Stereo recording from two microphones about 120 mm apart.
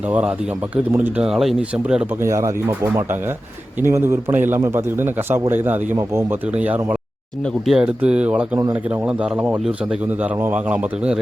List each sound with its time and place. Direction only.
0.1 s a man's voice: 10° right (ahead or behind)
2.2 s a man's voice: 25° right (ahead or behind)